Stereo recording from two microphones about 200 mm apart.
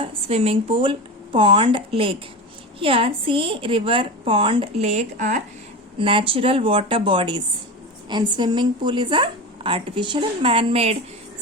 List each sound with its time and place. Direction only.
0.0 s a woman's voice: 30° right (ahead or behind)
6.0 s a woman's voice: 25° right (ahead or behind)